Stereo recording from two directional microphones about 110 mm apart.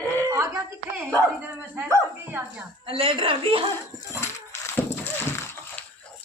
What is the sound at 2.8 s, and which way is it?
Speech, 55° right (ahead or behind).